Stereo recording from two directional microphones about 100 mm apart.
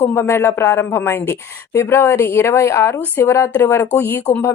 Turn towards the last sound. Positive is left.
turn(degrees=20)  # may be behind; listen again after turning